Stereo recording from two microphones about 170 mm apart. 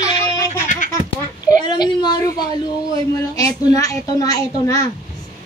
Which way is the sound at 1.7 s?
25° left (ahead or behind).